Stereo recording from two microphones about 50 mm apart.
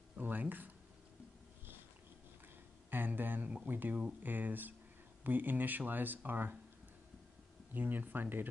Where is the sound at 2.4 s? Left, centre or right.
Right.